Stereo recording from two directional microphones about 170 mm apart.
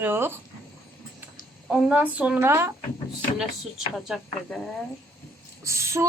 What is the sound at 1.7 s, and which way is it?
Speech, 5° right (ahead or behind).